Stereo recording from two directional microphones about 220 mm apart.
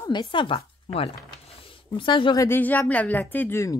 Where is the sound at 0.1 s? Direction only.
20° left (ahead or behind).